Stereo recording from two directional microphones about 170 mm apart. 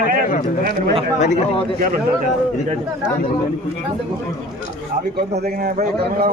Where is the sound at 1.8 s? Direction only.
50° right (ahead or behind).